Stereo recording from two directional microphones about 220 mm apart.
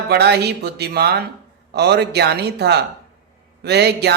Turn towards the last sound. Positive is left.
turn(degrees=-50)  # may be behind; listen again after turning